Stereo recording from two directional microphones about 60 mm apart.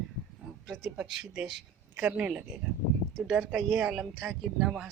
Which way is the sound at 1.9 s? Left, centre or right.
Right.